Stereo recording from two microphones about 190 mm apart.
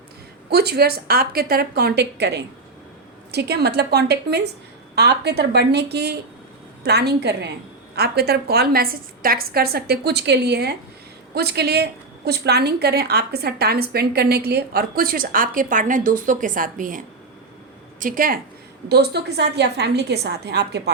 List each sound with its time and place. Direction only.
0.5 s a woman's voice: 55° right (ahead or behind)
18.0 s a woman's voice: 45° right (ahead or behind)
18.9 s a woman's voice: 60° right (ahead or behind)